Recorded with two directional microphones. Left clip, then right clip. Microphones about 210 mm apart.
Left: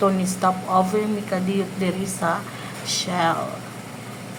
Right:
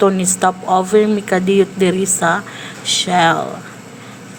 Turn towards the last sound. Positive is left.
turn(degrees=-25)  # may be behind; listen again after turning